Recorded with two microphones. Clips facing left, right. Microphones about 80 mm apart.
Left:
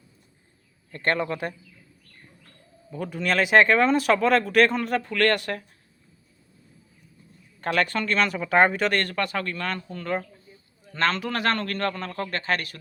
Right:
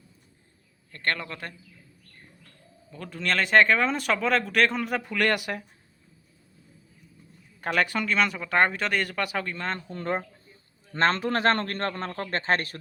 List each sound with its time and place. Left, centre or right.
0.9 s a man's voice: centre
2.9 s speech: centre
7.6 s speech: centre
8.4 s speech: centre
9.6 s a man's voice: right